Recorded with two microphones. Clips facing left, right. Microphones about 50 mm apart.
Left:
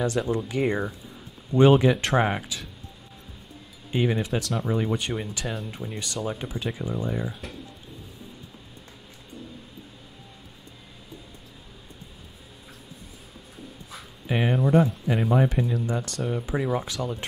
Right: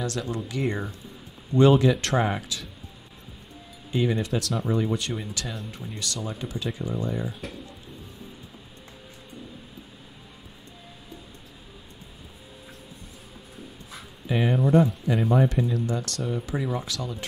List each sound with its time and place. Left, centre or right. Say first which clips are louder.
0.0 s speech: left 5 dB; centre
2.0 s speech: left 2 dB; left
3.9 s speech: even; left
4.4 s speech: even; centre
4.7 s speech: even; centre
14.2 s speech: even; centre
14.5 s speech: right 1 dB; centre